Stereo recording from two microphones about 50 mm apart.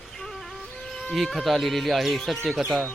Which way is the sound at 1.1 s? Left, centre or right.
Centre.